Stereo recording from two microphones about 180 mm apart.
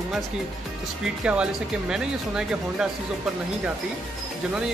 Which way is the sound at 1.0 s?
5° right (ahead or behind).